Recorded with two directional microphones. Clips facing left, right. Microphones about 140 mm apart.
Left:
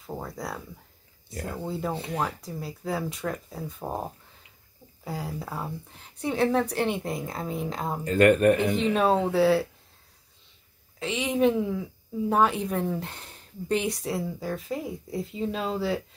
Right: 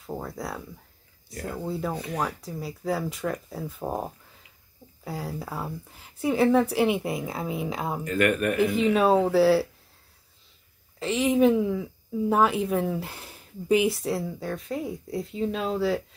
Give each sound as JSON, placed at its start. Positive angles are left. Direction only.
{"t": 0.0, "sound": "a woman's voice", "side_deg": 0}
{"t": 1.6, "sound": "a woman's voice", "side_deg": 0}
{"t": 2.0, "sound": "speech", "side_deg": 25}
{"t": 2.2, "sound": "a woman's voice", "side_deg": 0}
{"t": 8.0, "sound": "speech", "side_deg": 30}
{"t": 8.7, "sound": "a woman's voice", "side_deg": 0}
{"t": 11.0, "sound": "a woman's voice", "side_deg": 0}